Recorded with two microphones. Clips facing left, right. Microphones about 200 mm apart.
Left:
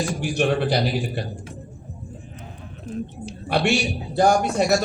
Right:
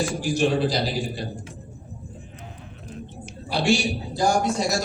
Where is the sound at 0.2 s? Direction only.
65° left (ahead or behind).